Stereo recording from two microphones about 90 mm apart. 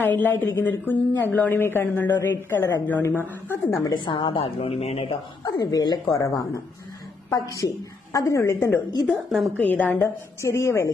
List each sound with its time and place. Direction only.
0.0 s speech: 20° left (ahead or behind)
3.9 s a woman's voice: 65° left (ahead or behind); by 5.1 s 90° left
5.4 s a woman's voice: 45° left (ahead or behind); by 10.9 s 30° left (ahead or behind)